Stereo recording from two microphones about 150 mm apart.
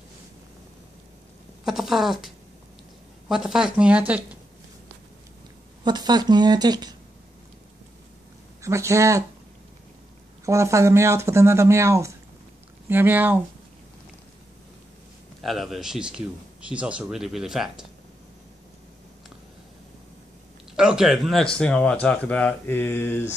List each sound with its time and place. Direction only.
1.6 s speech: centre (ahead or behind)
5.9 s speech: 30° right (ahead or behind)
8.6 s speech: 20° right (ahead or behind)
10.4 s speech: 20° right (ahead or behind)
15.4 s speech: centre (ahead or behind)
20.7 s speech: 5° right (ahead or behind); by 23.3 s 15° left (ahead or behind)